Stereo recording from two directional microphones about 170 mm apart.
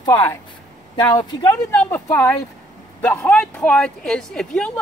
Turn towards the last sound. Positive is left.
turn(degrees=5)  # may be behind; listen again after turning